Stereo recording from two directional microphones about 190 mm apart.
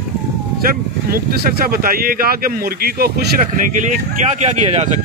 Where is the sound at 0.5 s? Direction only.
50° right (ahead or behind).